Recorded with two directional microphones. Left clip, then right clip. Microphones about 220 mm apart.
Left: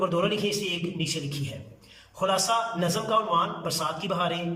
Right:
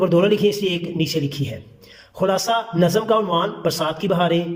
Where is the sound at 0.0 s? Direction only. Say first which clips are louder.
Right 9 dB; 25° right (ahead or behind).